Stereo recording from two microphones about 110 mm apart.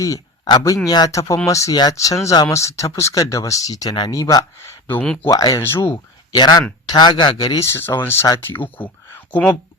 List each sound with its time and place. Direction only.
0.0 s a man's voice: 30° left (ahead or behind)
4.5 s speech: 20° left (ahead or behind)
5.3 s speech: 35° left (ahead or behind)
5.6 s speech: 25° left (ahead or behind)
6.3 s speech: 40° left (ahead or behind)
7.7 s speech: 20° left (ahead or behind)